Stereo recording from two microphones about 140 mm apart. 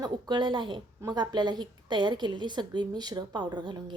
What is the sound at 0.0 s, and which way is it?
A woman's voice, 35° right (ahead or behind).